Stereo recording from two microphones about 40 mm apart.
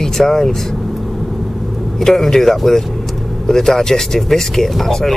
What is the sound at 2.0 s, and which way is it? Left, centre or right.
Speech, centre.